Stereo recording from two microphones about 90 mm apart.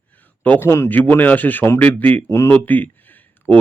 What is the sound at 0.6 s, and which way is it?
Speech, 30° left (ahead or behind).